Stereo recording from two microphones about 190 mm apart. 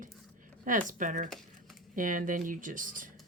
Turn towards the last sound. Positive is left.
turn(degrees=-45)  # may be behind; listen again after turning